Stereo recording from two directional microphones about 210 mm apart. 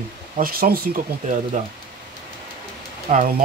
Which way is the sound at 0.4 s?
45° right (ahead or behind).